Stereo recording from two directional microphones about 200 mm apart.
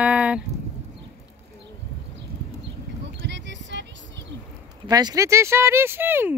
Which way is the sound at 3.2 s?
60° right (ahead or behind).